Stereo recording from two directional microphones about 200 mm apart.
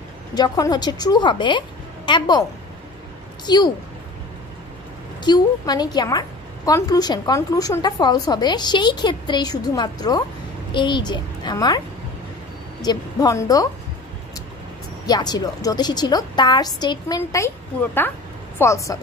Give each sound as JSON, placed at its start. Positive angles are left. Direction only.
{"t": 0.3, "sound": "a woman's voice", "side_deg": 20}
{"t": 3.4, "sound": "a woman's voice", "side_deg": 20}
{"t": 5.2, "sound": "a woman's voice", "side_deg": 20}
{"t": 12.8, "sound": "a woman's voice", "side_deg": 15}
{"t": 15.0, "sound": "a woman's voice", "side_deg": 20}
{"t": 18.6, "sound": "a woman's voice", "side_deg": 15}